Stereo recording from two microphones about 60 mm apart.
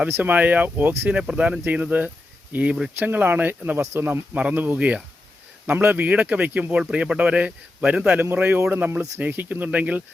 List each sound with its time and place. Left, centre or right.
0.2 s speech: right
8.2 s speech: right